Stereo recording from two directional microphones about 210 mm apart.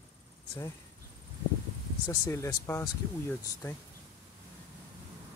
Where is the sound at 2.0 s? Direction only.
15° left (ahead or behind).